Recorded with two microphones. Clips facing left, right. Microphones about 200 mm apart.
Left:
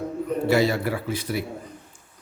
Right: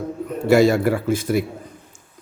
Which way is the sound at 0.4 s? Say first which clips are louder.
Right 7 dB; 45° right (ahead or behind).